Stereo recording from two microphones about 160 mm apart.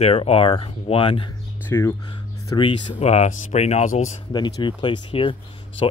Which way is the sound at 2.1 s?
30° left (ahead or behind).